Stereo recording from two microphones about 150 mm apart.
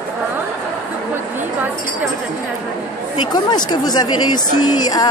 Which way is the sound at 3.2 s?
30° left (ahead or behind).